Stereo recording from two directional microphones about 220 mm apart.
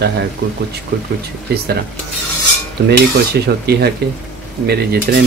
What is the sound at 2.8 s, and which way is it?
Speech, 45° right (ahead or behind).